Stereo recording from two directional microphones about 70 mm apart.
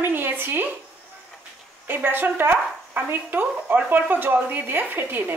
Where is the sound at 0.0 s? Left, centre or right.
Right.